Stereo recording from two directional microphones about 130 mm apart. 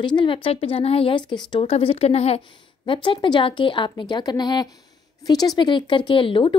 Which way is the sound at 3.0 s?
35° left (ahead or behind).